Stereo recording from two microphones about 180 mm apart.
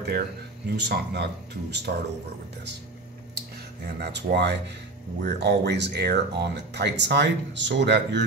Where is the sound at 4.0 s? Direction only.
70° right (ahead or behind).